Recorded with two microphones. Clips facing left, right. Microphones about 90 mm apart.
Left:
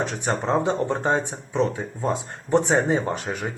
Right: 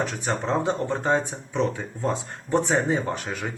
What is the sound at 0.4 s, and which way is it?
Speech, 25° left (ahead or behind).